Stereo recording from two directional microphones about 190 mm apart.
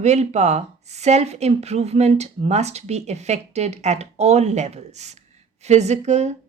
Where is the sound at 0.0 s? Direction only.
35° right (ahead or behind).